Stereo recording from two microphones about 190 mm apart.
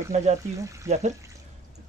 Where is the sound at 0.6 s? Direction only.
15° right (ahead or behind).